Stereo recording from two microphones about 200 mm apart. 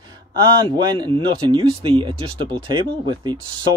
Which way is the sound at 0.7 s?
20° right (ahead or behind).